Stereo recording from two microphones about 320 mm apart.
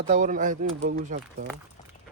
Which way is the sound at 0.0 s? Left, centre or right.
Right.